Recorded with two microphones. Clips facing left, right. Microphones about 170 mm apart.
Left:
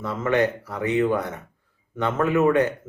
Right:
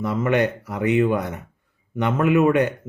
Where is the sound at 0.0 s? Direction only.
15° right (ahead or behind).